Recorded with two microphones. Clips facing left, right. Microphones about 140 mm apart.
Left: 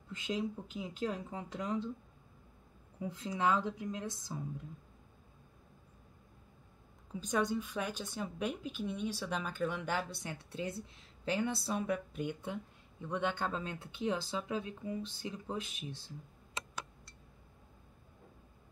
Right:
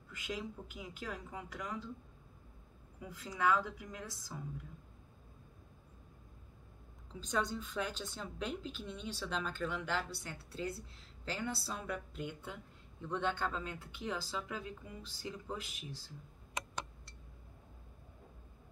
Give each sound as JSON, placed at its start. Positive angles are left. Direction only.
{"t": 0.1, "sound": "speech", "side_deg": 25}
{"t": 3.0, "sound": "speech", "side_deg": 25}
{"t": 7.1, "sound": "a woman's voice", "side_deg": 10}